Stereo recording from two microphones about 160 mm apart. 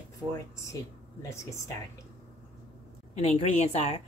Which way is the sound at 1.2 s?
20° left (ahead or behind).